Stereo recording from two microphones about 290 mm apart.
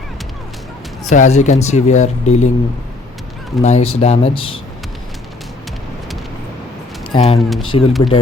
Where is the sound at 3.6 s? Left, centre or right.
Left.